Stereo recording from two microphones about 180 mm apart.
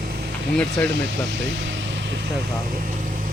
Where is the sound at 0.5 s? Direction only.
5° left (ahead or behind).